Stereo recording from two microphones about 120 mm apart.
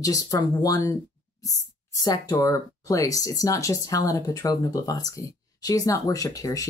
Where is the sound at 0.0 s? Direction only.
30° left (ahead or behind).